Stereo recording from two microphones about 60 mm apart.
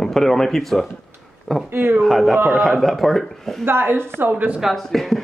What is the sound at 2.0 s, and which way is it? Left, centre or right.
Speech, centre.